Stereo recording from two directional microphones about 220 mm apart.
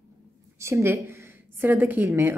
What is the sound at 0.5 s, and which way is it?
A woman's voice, 10° right (ahead or behind).